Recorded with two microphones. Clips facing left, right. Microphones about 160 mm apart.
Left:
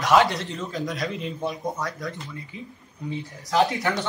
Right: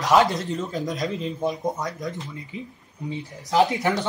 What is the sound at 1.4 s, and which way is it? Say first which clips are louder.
Speech: right 3 dB; 20° right (ahead or behind).